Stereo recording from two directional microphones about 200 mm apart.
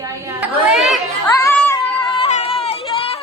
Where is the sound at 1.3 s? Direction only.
10° left (ahead or behind).